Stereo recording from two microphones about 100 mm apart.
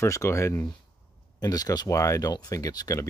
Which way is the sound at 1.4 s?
40° left (ahead or behind).